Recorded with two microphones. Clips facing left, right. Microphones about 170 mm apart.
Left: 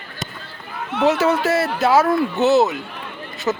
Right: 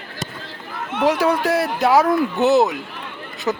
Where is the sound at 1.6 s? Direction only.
15° right (ahead or behind).